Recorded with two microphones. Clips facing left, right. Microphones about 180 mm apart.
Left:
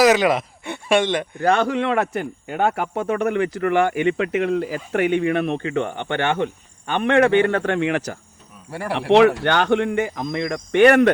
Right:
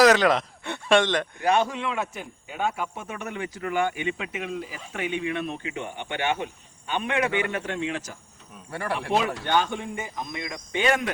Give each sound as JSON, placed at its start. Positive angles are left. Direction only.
{"t": 0.0, "sound": "speech", "side_deg": 5}
{"t": 1.4, "sound": "speech", "side_deg": 60}